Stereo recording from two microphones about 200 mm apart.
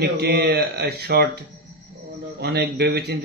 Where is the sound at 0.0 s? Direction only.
55° right (ahead or behind).